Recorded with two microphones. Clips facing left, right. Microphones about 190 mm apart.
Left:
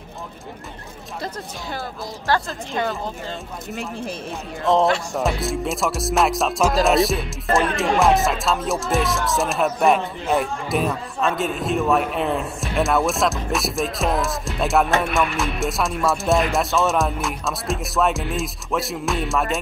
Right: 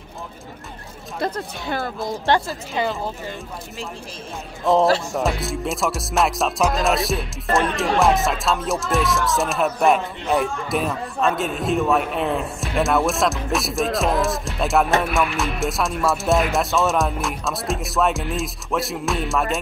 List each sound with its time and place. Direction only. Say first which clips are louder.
1.2 s speech: right 6 dB; 60° right (ahead or behind)
2.3 s speech: right 2 dB; 25° right (ahead or behind)
2.7 s music: right 1 dB; 5° right (ahead or behind)
4.7 s music: right 1 dB; centre (ahead or behind)